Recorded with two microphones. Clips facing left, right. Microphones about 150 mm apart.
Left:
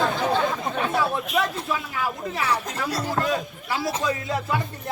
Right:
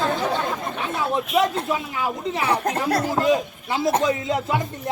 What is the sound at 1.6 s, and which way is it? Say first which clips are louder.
Speech: right 3 dB; 20° right (ahead or behind).